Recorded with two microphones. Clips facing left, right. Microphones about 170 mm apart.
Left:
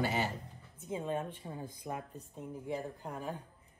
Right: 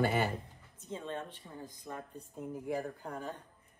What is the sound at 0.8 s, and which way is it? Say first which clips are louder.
Speech: left 4 dB; 15° left (ahead or behind).